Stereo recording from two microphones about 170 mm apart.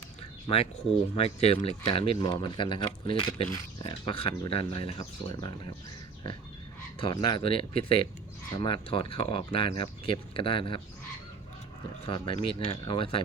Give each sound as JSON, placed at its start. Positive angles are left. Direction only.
{"t": 0.4, "sound": "speech", "side_deg": 35}
{"t": 7.0, "sound": "speech", "side_deg": 25}
{"t": 12.0, "sound": "speech", "side_deg": 30}